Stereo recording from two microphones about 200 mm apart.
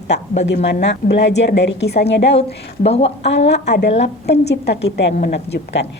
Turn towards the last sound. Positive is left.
turn(degrees=55)  # may be behind; listen again after turning